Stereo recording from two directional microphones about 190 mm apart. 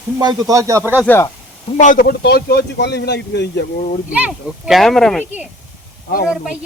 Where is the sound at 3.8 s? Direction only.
40° left (ahead or behind).